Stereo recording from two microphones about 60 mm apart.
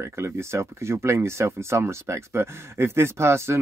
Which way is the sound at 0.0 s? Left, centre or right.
Right.